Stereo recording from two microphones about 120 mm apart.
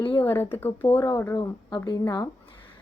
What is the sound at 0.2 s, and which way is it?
Speech, 15° left (ahead or behind).